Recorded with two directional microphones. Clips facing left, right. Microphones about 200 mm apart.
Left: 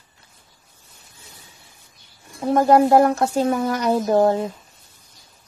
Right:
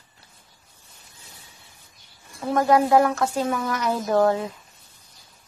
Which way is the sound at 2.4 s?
30° left (ahead or behind).